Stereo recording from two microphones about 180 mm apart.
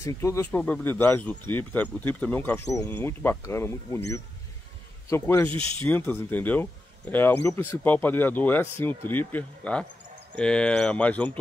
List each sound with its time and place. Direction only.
0.0 s speech: 15° left (ahead or behind)
5.5 s speech: 30° right (ahead or behind)
5.9 s speech: 10° left (ahead or behind)